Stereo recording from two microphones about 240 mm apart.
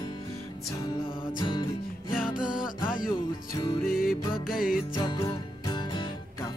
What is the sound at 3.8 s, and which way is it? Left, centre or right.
Music, left.